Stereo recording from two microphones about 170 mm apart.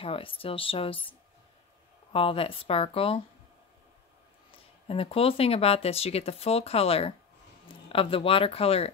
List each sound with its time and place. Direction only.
0.0 s speech: 30° left (ahead or behind)
2.1 s speech: 35° left (ahead or behind)
4.5 s speech: 35° left (ahead or behind)